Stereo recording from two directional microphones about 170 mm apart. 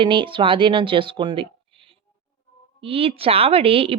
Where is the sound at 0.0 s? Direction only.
30° right (ahead or behind).